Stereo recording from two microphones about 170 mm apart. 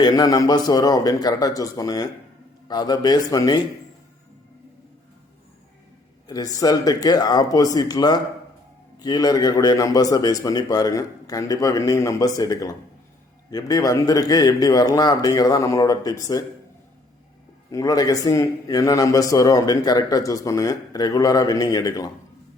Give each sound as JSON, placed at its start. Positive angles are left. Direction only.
{"t": 0.0, "sound": "a man's voice", "side_deg": 25}
{"t": 6.2, "sound": "a man's voice", "side_deg": 20}
{"t": 17.7, "sound": "a man's voice", "side_deg": 20}